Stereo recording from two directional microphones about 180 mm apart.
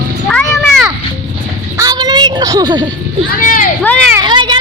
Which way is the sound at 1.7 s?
20° right (ahead or behind).